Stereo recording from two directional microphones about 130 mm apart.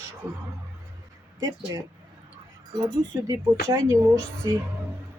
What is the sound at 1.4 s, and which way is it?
Speech, 25° right (ahead or behind).